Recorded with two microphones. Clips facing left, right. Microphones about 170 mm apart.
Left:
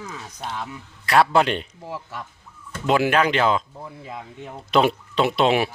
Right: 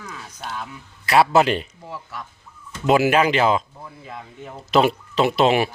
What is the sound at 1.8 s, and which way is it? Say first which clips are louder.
Speech: left 1 dB; 30° left (ahead or behind).